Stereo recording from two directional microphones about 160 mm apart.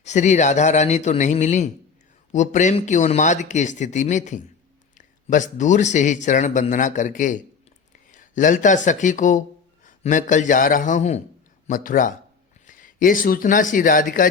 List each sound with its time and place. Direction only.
0.0 s a man's voice: 45° left (ahead or behind)